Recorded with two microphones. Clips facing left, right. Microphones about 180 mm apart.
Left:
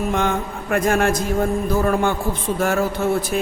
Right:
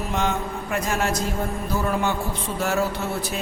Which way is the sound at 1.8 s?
50° left (ahead or behind).